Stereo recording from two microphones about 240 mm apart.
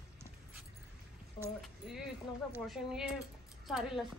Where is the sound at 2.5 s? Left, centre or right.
Centre.